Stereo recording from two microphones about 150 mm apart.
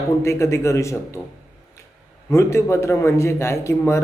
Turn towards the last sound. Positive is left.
turn(degrees=20)  # may be behind; listen again after turning